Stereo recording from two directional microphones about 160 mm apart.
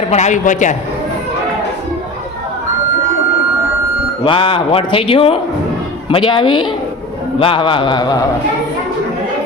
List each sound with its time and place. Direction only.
0.1 s a man's voice: 45° left (ahead or behind)
4.2 s a woman's voice: 30° left (ahead or behind)